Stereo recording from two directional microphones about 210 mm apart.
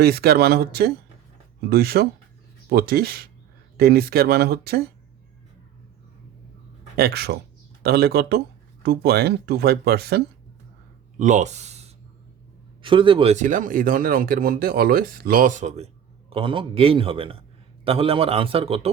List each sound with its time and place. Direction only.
0.0 s speech: 50° right (ahead or behind)
6.9 s speech: 50° right (ahead or behind)
11.2 s a man's voice: 35° right (ahead or behind)